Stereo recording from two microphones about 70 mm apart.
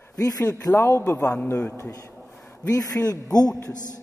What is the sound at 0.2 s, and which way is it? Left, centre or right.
Speech, left.